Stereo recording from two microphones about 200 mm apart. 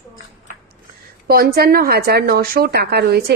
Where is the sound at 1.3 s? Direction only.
50° right (ahead or behind).